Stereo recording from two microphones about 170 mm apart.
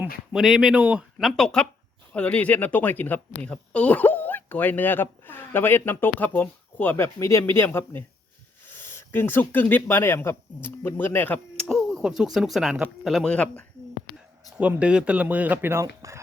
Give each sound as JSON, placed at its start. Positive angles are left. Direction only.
{"t": 0.3, "sound": "speech", "side_deg": 0}
{"t": 14.6, "sound": "speech", "side_deg": -10}